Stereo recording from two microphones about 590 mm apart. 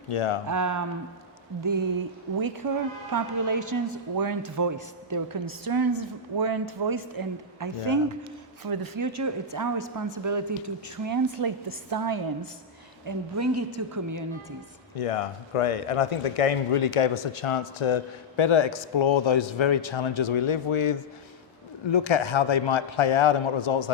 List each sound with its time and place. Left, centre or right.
0.1 s a man's voice: left
0.4 s a woman's voice: right
2.6 s a woman's voice: right
14.9 s a man's voice: left